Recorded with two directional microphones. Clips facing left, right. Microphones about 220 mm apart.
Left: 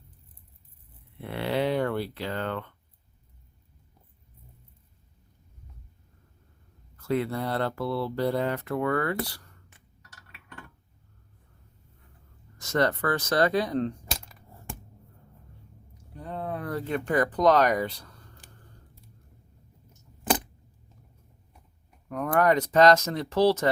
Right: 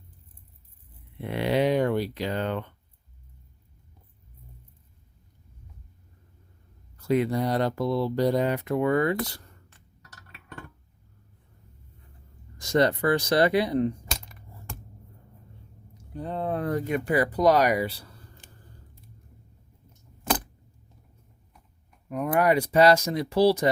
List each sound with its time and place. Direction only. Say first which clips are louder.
1.2 s speech: right 3 dB; 15° right (ahead or behind)
6.9 s speech: right 4 dB; 15° right (ahead or behind)
10.0 s chink: right 4 dB; 40° right (ahead or behind)
12.5 s speech: right 3 dB; 15° right (ahead or behind)
16.1 s a sound: right 5 dB; 30° right (ahead or behind)
16.7 s speech: even; 10° right (ahead or behind)
22.1 s speech: right 1 dB; 10° right (ahead or behind)